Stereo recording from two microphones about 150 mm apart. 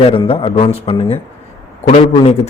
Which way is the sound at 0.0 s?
40° left (ahead or behind).